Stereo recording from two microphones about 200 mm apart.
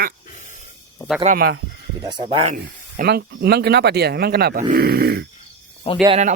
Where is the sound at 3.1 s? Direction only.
50° right (ahead or behind).